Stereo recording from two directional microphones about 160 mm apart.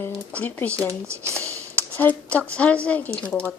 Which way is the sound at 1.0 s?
15° right (ahead or behind).